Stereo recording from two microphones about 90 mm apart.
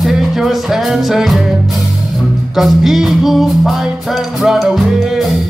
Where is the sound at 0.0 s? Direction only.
Centre (ahead or behind).